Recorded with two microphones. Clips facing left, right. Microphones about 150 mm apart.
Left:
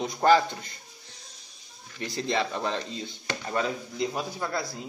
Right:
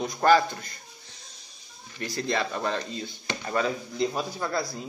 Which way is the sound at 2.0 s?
25° left (ahead or behind).